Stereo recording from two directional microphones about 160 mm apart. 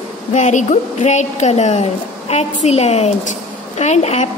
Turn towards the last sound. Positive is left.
turn(degrees=45)  # may be behind; listen again after turning